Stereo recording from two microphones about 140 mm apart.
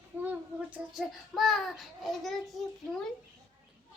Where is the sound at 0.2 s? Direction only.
10° right (ahead or behind).